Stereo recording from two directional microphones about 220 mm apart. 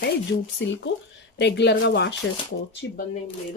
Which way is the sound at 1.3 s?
50° left (ahead or behind).